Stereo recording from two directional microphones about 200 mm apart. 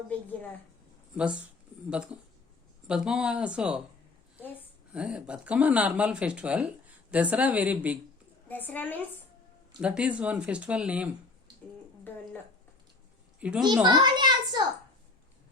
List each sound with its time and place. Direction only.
1.1 s speech: 5° right (ahead or behind)
2.8 s speech: 5° right (ahead or behind)
4.9 s speech: 5° right (ahead or behind)
8.4 s a woman's voice: 10° left (ahead or behind)
9.8 s speech: 5° right (ahead or behind)
13.4 s speech: 5° right (ahead or behind)
13.8 s a child's voice: 20° right (ahead or behind)